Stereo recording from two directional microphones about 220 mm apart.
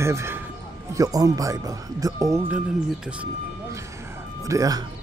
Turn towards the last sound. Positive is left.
turn(degrees=-15)  # may be behind; listen again after turning